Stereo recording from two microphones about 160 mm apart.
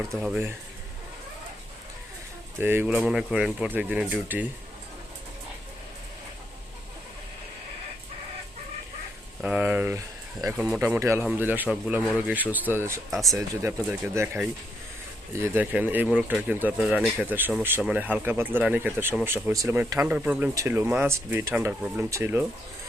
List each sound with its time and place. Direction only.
0.1 s speech: centre (ahead or behind)
2.6 s speech: 15° right (ahead or behind)
9.4 s speech: 10° right (ahead or behind)
13.1 s speech: centre (ahead or behind)
13.3 s speech: 20° right (ahead or behind)